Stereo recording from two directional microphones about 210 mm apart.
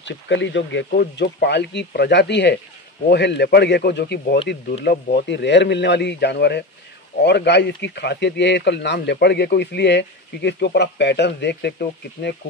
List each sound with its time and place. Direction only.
0.0 s speech: 60° left (ahead or behind)